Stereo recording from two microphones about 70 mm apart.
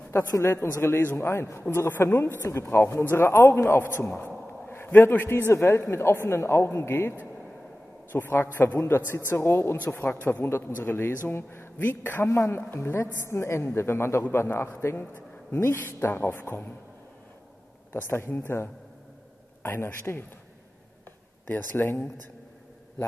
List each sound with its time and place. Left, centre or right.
0.1 s a man's voice: left
12.3 s a man's voice: left
17.9 s a man's voice: left
21.5 s a man's voice: left